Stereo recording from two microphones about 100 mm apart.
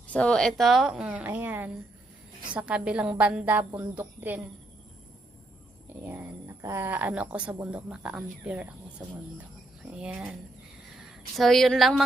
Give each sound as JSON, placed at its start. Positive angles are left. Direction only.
{"t": 0.1, "sound": "speech", "side_deg": 10}
{"t": 5.9, "sound": "a sound", "side_deg": -20}
{"t": 6.8, "sound": "speech", "side_deg": -15}
{"t": 9.8, "sound": "speech", "side_deg": -10}
{"t": 11.3, "sound": "speech", "side_deg": 0}